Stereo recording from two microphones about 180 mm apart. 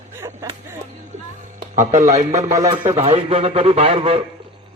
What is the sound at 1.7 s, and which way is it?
Speech, 40° right (ahead or behind).